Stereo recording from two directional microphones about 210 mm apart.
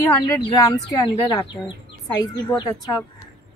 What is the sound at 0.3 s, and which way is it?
A woman's voice, 20° left (ahead or behind).